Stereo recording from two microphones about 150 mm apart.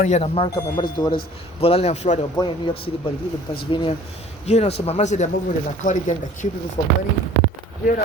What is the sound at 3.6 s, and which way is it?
Speech, 35° left (ahead or behind).